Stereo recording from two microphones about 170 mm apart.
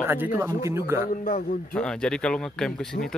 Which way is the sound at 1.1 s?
50° left (ahead or behind).